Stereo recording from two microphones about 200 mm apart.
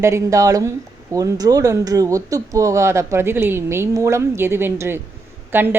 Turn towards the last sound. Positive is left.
turn(degrees=-10)  # may be behind; listen again after turning